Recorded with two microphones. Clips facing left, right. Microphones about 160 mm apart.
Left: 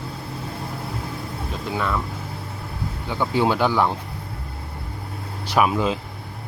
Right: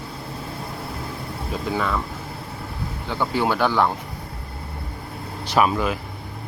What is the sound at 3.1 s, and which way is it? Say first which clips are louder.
Speech: left 2 dB; 15° left (ahead or behind).